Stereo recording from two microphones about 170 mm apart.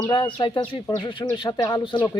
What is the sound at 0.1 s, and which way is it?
Speech, 30° left (ahead or behind).